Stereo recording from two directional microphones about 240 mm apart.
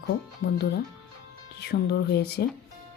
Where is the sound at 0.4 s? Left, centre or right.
Left.